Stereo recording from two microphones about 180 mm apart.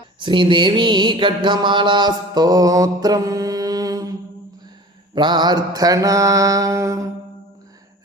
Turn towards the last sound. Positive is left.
turn(degrees=-15)  # may be behind; listen again after turning